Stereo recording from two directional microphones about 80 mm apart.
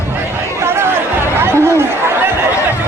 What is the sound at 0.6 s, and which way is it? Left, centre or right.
Chatter, right.